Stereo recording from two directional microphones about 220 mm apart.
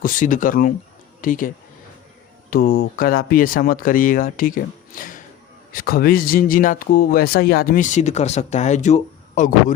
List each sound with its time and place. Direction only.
0.0 s speech: 35° left (ahead or behind)